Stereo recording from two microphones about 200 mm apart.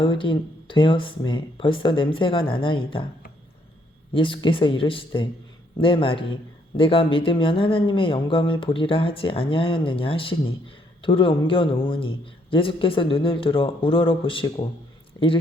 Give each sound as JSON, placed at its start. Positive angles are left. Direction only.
{"t": 0.0, "sound": "speech", "side_deg": 25}
{"t": 4.1, "sound": "speech", "side_deg": 25}